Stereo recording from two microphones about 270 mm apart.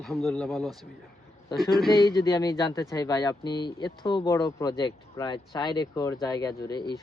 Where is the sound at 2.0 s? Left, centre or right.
Centre.